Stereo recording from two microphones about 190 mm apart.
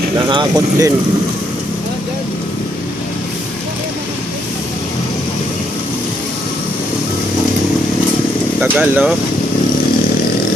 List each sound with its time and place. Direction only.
0.3 s speech: 20° right (ahead or behind)
8.6 s speech: 5° right (ahead or behind)